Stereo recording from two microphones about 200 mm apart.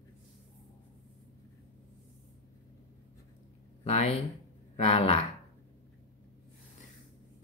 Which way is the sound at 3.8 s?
30° left (ahead or behind).